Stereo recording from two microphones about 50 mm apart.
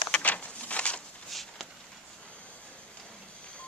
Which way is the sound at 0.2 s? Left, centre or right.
Left.